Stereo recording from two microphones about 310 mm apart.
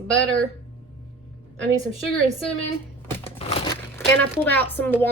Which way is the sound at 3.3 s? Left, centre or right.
Centre.